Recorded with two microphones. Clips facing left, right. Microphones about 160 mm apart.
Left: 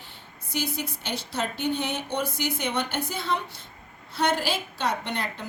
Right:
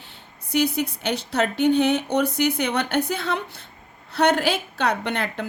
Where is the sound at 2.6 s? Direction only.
65° right (ahead or behind).